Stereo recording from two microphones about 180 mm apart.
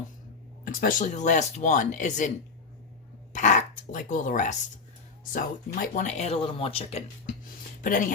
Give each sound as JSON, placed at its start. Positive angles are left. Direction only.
{"t": 0.6, "sound": "speech", "side_deg": 50}
{"t": 3.3, "sound": "speech", "side_deg": 45}
{"t": 7.8, "sound": "speech", "side_deg": 50}